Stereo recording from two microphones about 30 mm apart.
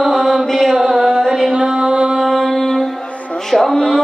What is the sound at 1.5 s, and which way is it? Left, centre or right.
Music, right.